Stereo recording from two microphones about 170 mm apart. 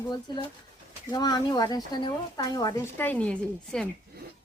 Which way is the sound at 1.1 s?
25° left (ahead or behind).